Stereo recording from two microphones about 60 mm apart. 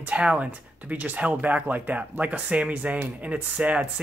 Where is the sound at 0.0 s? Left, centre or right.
Right.